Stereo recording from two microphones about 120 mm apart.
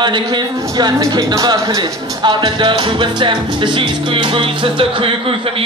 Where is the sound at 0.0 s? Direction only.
40° right (ahead or behind).